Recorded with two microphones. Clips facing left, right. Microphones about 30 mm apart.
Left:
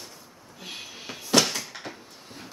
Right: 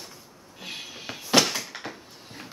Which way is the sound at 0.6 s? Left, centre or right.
Centre.